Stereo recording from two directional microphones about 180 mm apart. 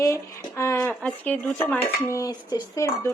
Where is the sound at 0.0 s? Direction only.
15° left (ahead or behind).